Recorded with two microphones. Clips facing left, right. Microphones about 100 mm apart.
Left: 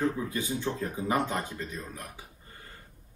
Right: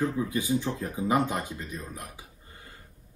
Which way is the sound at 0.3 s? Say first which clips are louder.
Right 4 dB; 15° right (ahead or behind).